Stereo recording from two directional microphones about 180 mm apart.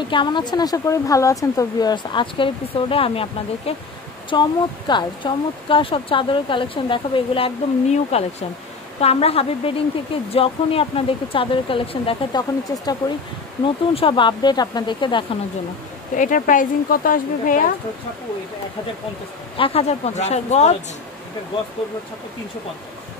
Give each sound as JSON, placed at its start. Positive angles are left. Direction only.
{"t": 0.1, "sound": "speech", "side_deg": 25}
{"t": 13.9, "sound": "speech", "side_deg": 30}
{"t": 16.2, "sound": "a woman's voice", "side_deg": 45}
{"t": 19.5, "sound": "speech", "side_deg": 30}